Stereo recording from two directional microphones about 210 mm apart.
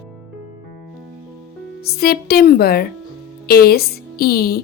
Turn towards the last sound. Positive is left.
turn(degrees=45)  # may be behind; listen again after turning